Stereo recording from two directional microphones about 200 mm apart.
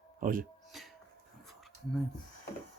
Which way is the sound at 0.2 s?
45° right (ahead or behind).